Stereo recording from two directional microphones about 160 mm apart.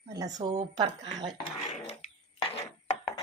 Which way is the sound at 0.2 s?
25° right (ahead or behind).